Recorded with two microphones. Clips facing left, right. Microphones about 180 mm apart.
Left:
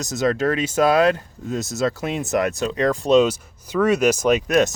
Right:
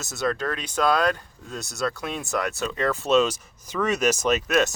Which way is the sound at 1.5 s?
20° left (ahead or behind).